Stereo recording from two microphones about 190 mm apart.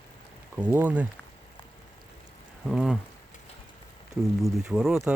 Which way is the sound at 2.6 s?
Centre (ahead or behind).